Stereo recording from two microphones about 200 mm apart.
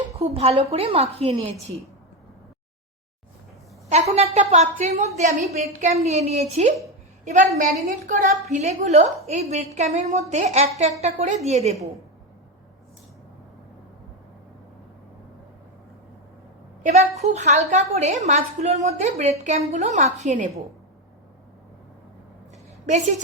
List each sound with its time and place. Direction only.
0.0 s speech: 30° right (ahead or behind)
3.8 s a woman's voice: 35° right (ahead or behind)
16.8 s a woman's voice: 35° right (ahead or behind)